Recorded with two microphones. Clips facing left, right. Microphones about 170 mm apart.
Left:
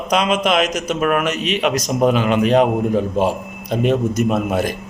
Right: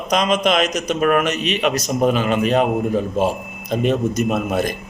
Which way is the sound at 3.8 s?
10° left (ahead or behind).